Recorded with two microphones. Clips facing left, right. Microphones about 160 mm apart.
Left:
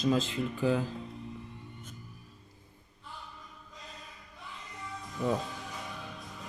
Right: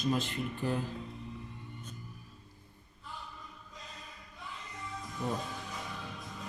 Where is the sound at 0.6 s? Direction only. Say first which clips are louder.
Left 6 dB; 90° left.